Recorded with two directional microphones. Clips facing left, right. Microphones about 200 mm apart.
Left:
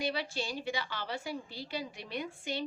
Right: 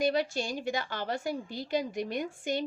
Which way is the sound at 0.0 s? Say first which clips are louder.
Right 7 dB; 45° right (ahead or behind).